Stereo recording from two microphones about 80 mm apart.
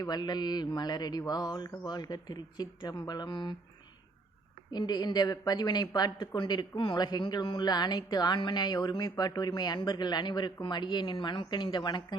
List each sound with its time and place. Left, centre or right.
0.0 s speech: left
4.7 s speech: left